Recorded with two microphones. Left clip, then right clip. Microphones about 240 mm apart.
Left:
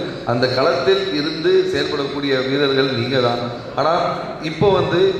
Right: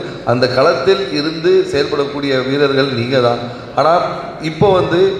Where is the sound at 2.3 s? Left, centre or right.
Right.